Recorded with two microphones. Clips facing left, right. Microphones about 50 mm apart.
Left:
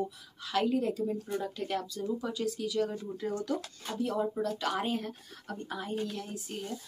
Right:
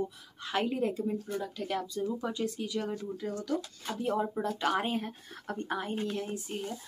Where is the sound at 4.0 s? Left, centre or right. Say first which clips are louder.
Even; right.